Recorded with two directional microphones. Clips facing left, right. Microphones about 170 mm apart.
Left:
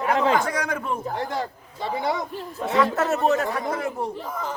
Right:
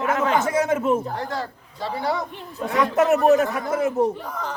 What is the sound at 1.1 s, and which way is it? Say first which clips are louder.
A man's voice: left 1 dB; 20° left (ahead or behind).